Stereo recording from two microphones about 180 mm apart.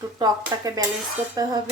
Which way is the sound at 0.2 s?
20° right (ahead or behind).